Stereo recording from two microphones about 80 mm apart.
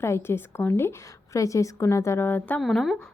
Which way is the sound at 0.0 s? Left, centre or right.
Left.